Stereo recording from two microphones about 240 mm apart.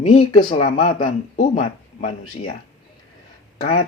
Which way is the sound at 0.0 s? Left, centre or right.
Left.